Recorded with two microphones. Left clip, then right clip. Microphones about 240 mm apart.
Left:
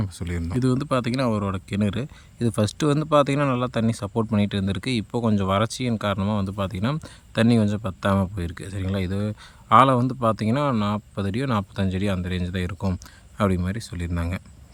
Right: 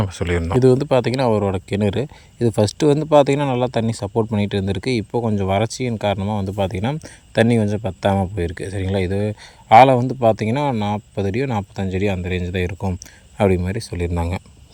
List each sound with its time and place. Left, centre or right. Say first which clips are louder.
0.0 s speech: right 11 dB; right
0.6 s speech: right 8 dB; centre